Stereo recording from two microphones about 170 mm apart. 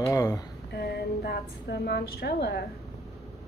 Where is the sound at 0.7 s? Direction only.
70° left (ahead or behind).